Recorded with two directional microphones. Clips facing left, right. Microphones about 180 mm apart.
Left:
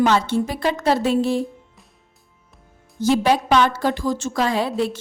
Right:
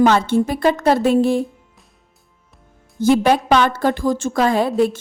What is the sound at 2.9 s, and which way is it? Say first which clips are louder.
A woman's voice: right 3 dB; 55° right (ahead or behind).